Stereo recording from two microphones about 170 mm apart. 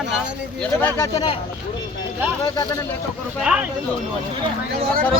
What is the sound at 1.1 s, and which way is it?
Speech, 25° left (ahead or behind).